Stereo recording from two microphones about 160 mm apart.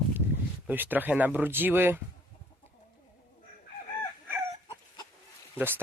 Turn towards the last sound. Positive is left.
turn(degrees=-15)  # may be behind; listen again after turning